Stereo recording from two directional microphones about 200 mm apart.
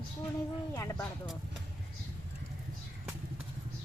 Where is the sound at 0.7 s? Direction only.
15° left (ahead or behind).